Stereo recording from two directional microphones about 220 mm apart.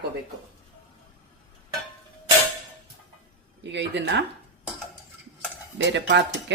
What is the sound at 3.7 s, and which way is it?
Speech, 55° right (ahead or behind).